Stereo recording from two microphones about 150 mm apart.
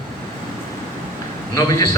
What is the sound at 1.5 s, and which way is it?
Speech, 20° left (ahead or behind).